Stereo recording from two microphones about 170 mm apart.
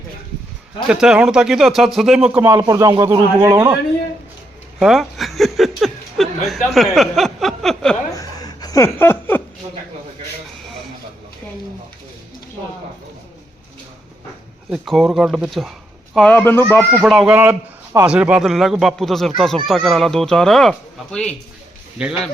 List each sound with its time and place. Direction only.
0.9 s a man's voice: 5° right (ahead or behind)
4.8 s speech: centre (ahead or behind)
8.1 s chuckle: 20° left (ahead or behind)
14.7 s a man's voice: centre (ahead or behind)
16.9 s a man's voice: 5° right (ahead or behind)
22.0 s speech: 5° right (ahead or behind)